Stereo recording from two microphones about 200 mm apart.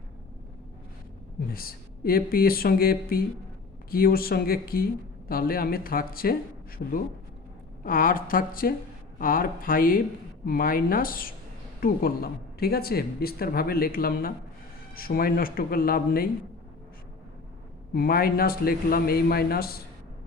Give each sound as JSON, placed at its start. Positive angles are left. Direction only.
{"t": 1.5, "sound": "speech", "side_deg": 50}
{"t": 7.9, "sound": "speech", "side_deg": 45}
{"t": 17.9, "sound": "speech", "side_deg": 50}